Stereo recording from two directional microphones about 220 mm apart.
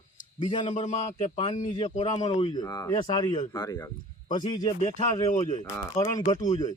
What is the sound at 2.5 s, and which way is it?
Speech, 15° left (ahead or behind).